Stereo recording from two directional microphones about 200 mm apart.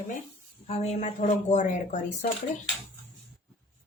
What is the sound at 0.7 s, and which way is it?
A woman's voice, 30° left (ahead or behind).